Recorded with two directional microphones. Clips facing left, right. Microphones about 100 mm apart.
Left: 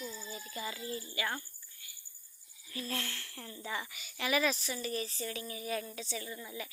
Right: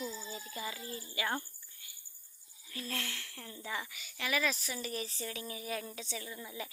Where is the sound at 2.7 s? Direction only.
5° left (ahead or behind).